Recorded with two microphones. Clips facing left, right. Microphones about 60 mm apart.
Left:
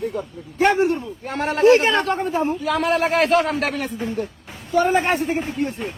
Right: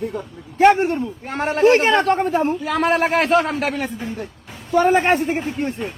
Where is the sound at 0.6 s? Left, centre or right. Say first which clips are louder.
Right 3 dB; right.